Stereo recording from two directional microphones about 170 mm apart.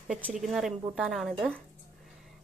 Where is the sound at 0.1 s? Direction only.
5° right (ahead or behind).